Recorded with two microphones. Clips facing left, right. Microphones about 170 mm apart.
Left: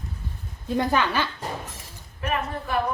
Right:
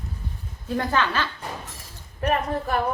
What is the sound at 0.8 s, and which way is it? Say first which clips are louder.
Speech: left 1 dB; 15° left (ahead or behind).